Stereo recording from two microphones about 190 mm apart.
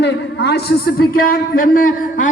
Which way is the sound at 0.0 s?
60° left (ahead or behind).